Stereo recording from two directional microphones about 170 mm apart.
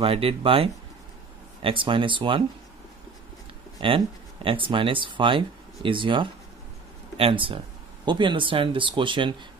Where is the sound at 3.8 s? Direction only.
30° right (ahead or behind).